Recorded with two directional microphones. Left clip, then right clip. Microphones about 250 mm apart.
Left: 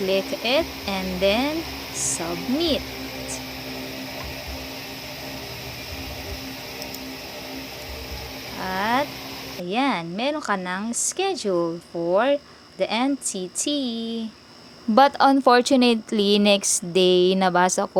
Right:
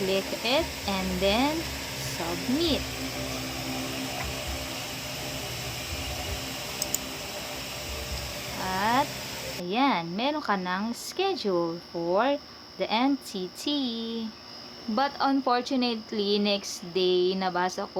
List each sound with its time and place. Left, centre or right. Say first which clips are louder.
0.1 s a woman's voice: left 6 dB; centre
2.6 s a woman's voice: left 4 dB; centre
8.7 s a sound: left 3 dB; centre
9.6 s a woman's voice: left 2 dB; centre
14.9 s speech: left 10 dB; left